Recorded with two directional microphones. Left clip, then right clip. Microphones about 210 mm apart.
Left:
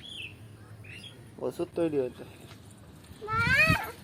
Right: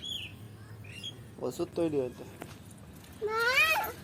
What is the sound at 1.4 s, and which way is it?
Speech, 35° left (ahead or behind).